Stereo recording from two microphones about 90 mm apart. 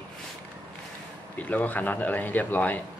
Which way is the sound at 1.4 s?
15° left (ahead or behind).